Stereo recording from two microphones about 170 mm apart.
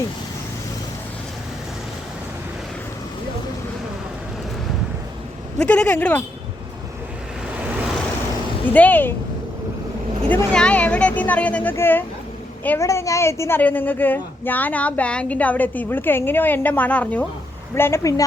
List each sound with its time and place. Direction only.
5.5 s a woman's voice: 5° left (ahead or behind)
8.6 s a woman's voice: 10° left (ahead or behind)
10.2 s a woman's voice: 5° left (ahead or behind)